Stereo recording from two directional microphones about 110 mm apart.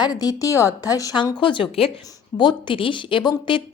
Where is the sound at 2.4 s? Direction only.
45° left (ahead or behind).